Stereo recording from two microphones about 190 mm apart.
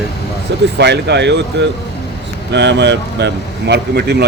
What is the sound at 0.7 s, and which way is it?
Speech, 65° right (ahead or behind).